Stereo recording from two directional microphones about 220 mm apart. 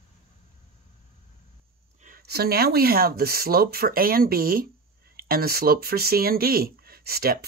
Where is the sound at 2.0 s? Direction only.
45° right (ahead or behind).